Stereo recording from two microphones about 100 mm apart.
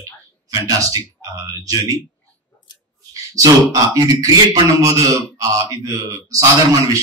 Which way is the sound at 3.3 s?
35° right (ahead or behind).